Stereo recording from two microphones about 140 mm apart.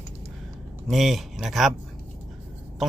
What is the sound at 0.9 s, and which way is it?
Speech, centre (ahead or behind).